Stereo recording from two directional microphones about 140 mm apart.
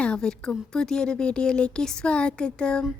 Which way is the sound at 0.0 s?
5° left (ahead or behind).